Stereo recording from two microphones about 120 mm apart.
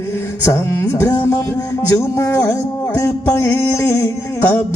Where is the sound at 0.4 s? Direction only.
20° left (ahead or behind).